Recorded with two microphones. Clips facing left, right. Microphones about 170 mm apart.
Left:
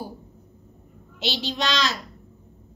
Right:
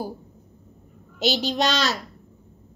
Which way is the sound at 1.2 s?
45° right (ahead or behind).